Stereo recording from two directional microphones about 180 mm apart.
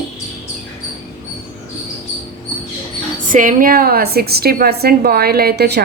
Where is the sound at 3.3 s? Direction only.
45° right (ahead or behind).